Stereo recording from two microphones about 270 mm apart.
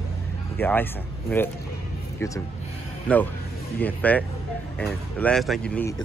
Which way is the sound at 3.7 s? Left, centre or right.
Centre.